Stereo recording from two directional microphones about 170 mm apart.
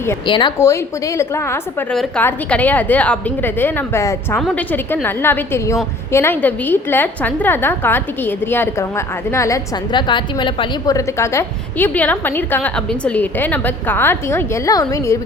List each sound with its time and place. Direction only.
0.3 s speech: 30° left (ahead or behind)
0.6 s a woman's voice: 15° left (ahead or behind)